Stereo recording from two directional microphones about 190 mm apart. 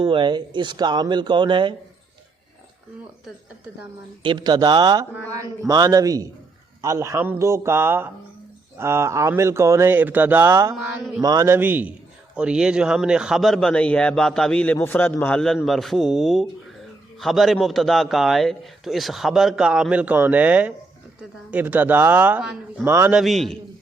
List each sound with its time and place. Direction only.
0.0 s speech: 25° right (ahead or behind)
4.2 s a man's voice: 25° right (ahead or behind)
23.2 s a man's voice: centre (ahead or behind)